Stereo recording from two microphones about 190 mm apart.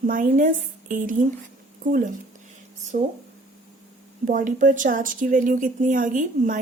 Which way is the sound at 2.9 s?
40° right (ahead or behind).